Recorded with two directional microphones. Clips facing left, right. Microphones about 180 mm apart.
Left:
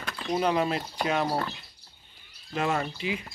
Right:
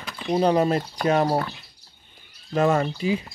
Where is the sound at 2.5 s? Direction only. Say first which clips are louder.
Right 7 dB; 40° right (ahead or behind).